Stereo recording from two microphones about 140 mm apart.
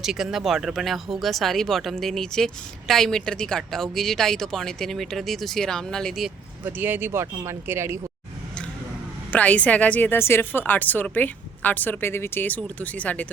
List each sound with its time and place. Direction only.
0.0 s a woman's voice: 5° right (ahead or behind)
6.7 s speech: 15° right (ahead or behind)
9.3 s a woman's voice: 10° left (ahead or behind)